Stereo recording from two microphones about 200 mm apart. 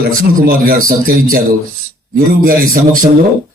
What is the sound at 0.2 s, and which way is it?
A man's voice, 45° right (ahead or behind).